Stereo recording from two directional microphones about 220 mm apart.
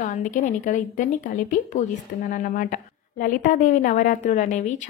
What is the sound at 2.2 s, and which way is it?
A woman's voice, 40° left (ahead or behind).